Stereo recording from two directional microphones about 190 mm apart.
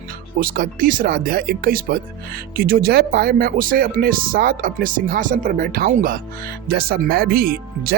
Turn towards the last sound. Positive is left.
turn(degrees=-50)  # may be behind; listen again after turning